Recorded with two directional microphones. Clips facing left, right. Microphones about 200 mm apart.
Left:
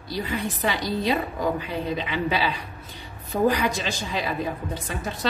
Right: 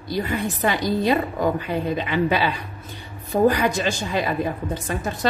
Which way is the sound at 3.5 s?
50° right (ahead or behind).